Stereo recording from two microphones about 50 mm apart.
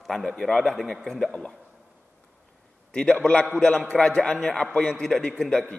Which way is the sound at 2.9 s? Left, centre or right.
Centre.